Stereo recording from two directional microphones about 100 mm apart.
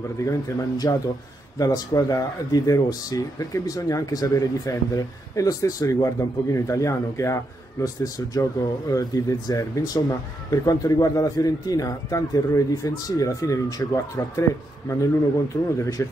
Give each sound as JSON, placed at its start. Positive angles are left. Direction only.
{"t": 0.2, "sound": "speech", "side_deg": 35}
{"t": 15.8, "sound": "speech", "side_deg": 30}